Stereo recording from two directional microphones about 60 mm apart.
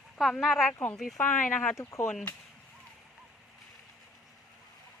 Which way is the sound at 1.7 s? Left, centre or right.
Left.